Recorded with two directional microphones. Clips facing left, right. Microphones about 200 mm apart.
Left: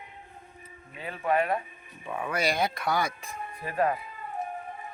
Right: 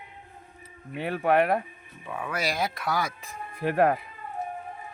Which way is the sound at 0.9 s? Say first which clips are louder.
Right 4 dB; 70° right (ahead or behind).